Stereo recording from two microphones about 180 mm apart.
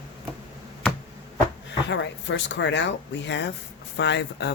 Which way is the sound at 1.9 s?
90° left.